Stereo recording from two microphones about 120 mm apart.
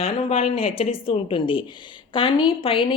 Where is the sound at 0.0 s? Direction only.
55° left (ahead or behind).